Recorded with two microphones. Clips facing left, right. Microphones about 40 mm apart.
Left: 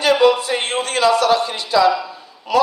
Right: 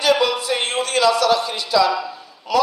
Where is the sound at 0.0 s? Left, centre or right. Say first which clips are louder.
Left 4 dB; left.